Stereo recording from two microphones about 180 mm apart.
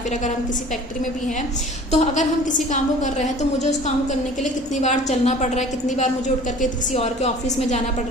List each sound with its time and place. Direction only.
1.9 s a woman's voice: 40° left (ahead or behind)